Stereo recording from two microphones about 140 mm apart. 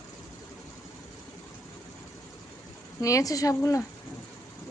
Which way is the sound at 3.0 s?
25° left (ahead or behind).